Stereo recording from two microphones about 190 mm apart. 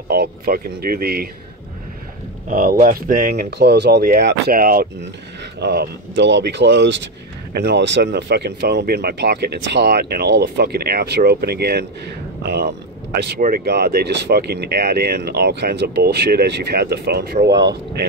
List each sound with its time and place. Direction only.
0.1 s speech: 55° right (ahead or behind)
2.4 s speech: 50° right (ahead or behind)
5.4 s speech: 60° right (ahead or behind)
17.5 s speech: 20° right (ahead or behind)